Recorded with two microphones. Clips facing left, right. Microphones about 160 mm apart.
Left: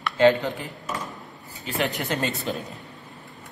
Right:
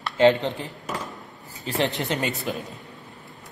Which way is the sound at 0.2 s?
20° right (ahead or behind).